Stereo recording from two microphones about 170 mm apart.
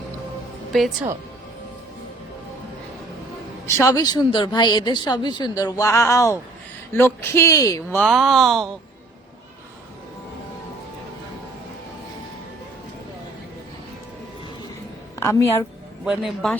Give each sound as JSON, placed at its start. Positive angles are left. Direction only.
{"t": 0.7, "sound": "a woman's voice", "side_deg": 0}
{"t": 3.8, "sound": "a woman's voice", "side_deg": 20}
{"t": 7.9, "sound": "speech", "side_deg": 0}
{"t": 15.2, "sound": "speech", "side_deg": 15}
{"t": 16.0, "sound": "speech", "side_deg": 0}